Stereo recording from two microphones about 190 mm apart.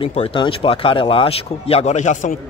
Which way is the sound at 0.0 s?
30° left (ahead or behind).